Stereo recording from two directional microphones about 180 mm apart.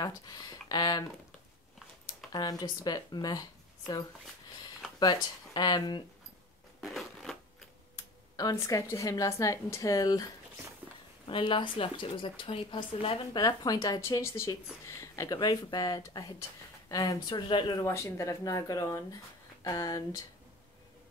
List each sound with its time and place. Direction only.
0.0 s speech: 20° left (ahead or behind)
2.3 s speech: 20° left (ahead or behind)
6.8 s crushing: centre (ahead or behind)
8.4 s speech: 20° left (ahead or behind)
10.8 s a sound: 10° right (ahead or behind)
11.2 s speech: 30° left (ahead or behind)